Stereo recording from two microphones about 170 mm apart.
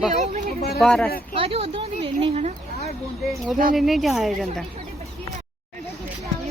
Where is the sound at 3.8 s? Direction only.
Centre (ahead or behind).